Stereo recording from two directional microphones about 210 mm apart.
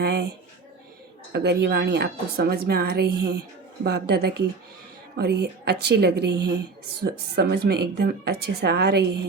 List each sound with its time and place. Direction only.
0.0 s speech: 50° right (ahead or behind)
1.3 s speech: 50° right (ahead or behind)